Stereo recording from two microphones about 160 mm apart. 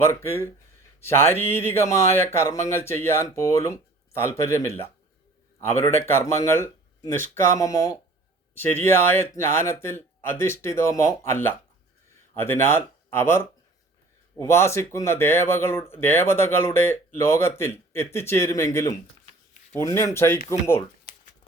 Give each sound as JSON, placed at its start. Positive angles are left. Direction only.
{"t": 0.0, "sound": "speech", "side_deg": 15}